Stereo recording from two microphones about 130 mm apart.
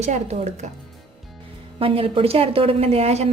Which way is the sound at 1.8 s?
45° right (ahead or behind).